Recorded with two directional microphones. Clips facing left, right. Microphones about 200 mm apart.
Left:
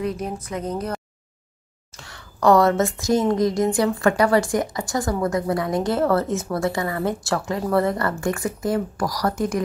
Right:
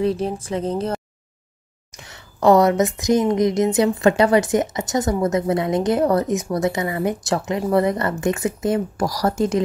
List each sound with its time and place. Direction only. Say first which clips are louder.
0.0 s a woman's voice: right 5 dB; 30° right (ahead or behind)